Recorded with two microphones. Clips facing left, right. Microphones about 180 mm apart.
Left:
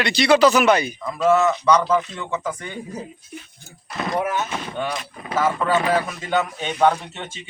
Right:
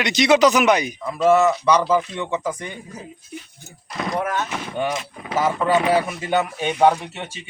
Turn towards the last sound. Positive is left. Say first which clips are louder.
# right 2 dB
turn(degrees=-10)  # may be behind; listen again after turning